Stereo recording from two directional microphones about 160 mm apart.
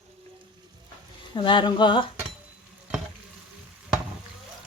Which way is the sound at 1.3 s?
30° left (ahead or behind).